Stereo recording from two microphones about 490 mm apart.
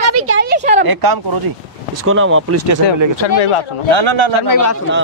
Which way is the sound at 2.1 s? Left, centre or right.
Right.